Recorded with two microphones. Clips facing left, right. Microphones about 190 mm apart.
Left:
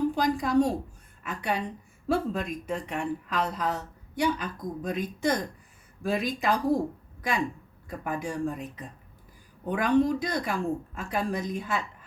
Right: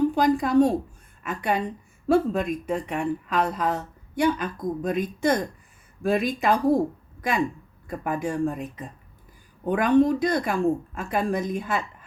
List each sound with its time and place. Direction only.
0.2 s a woman's voice: 55° right (ahead or behind)
9.6 s speech: 55° right (ahead or behind)